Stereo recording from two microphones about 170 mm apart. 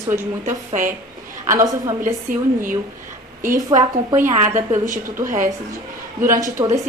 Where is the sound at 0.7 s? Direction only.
50° right (ahead or behind).